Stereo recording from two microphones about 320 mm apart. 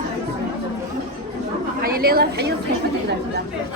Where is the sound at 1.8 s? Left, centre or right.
Right.